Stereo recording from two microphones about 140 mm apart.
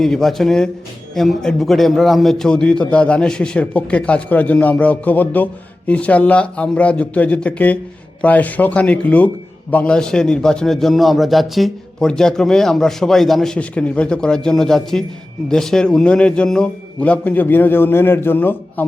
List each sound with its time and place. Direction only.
0.0 s a man's voice: centre (ahead or behind)